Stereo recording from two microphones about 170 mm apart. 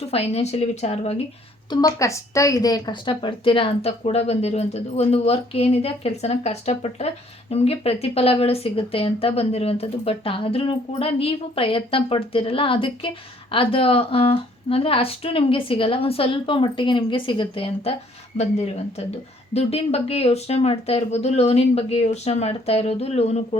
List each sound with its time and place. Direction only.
0.0 s a woman's voice: 35° left (ahead or behind)
1.7 s a woman's voice: 20° left (ahead or behind); by 23.4 s 40° left (ahead or behind)